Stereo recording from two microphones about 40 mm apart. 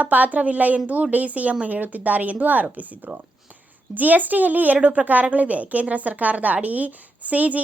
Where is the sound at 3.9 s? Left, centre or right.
Right.